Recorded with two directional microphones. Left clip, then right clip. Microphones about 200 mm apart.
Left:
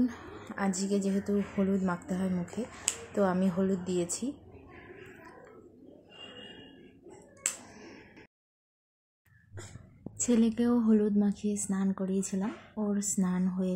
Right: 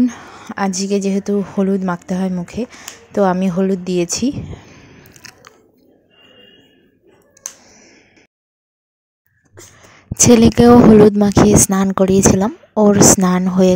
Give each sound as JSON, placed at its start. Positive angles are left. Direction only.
{"t": 0.0, "sound": "a woman's voice", "side_deg": -35}
{"t": 7.7, "sound": "a sound", "side_deg": -15}
{"t": 10.1, "sound": "a woman's voice", "side_deg": -50}